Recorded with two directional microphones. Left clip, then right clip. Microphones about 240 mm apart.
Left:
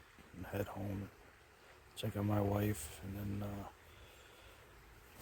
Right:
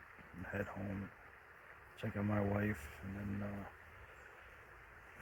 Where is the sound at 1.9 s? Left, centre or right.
Centre.